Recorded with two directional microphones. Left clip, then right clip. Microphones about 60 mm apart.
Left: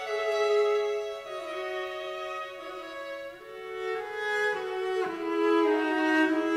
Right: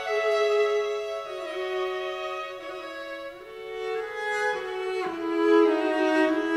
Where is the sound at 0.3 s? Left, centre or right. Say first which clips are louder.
Right 2 dB; right.